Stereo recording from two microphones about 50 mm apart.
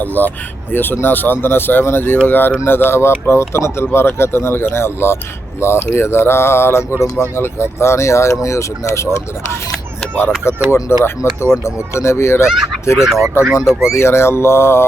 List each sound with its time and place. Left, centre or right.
0.0 s speech: left
10.7 s speech: left
13.0 s speech: centre
13.9 s speech: left